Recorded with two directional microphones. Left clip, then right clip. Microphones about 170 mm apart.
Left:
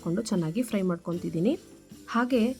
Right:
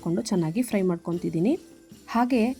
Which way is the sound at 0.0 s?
10° right (ahead or behind).